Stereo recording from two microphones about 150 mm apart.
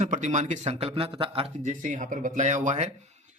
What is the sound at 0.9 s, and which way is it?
Speech, 35° right (ahead or behind).